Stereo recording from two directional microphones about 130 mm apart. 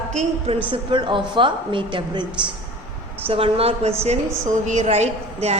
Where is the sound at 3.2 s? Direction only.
45° right (ahead or behind).